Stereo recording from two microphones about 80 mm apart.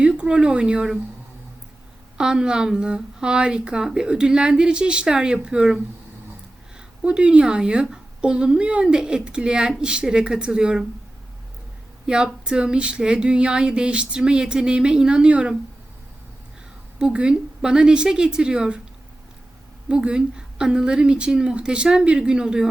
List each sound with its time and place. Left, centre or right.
0.0 s speech: centre
2.1 s a woman's voice: centre
12.0 s a woman's voice: centre
17.0 s a woman's voice: centre
19.9 s a woman's voice: centre